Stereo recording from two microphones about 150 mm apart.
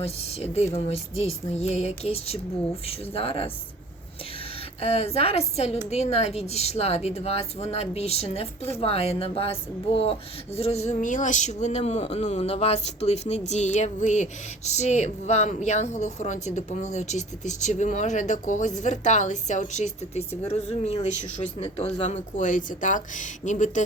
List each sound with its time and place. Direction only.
0.0 s speech: 45° left (ahead or behind)
4.8 s speech: 45° left (ahead or behind)